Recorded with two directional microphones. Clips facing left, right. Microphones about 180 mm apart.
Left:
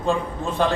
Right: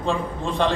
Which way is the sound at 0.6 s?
5° left (ahead or behind).